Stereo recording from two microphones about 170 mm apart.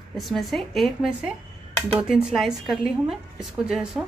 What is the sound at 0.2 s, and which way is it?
A woman's voice, centre (ahead or behind).